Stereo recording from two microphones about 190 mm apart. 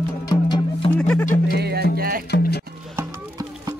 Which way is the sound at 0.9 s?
10° left (ahead or behind).